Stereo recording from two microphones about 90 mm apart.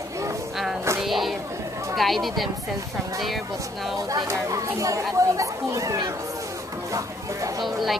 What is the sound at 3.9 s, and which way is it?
Speech, 45° right (ahead or behind).